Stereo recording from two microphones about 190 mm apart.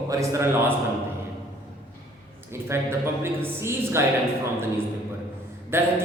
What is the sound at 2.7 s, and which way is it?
A man's voice, 15° right (ahead or behind).